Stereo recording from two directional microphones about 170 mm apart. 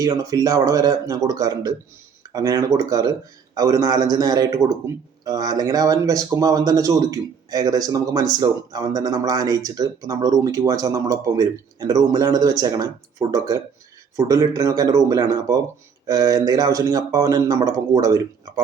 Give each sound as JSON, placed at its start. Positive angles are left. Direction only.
{"t": 0.0, "sound": "speech", "side_deg": -20}